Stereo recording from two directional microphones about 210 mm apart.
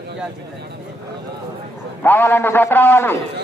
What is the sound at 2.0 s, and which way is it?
A man's voice, 10° left (ahead or behind).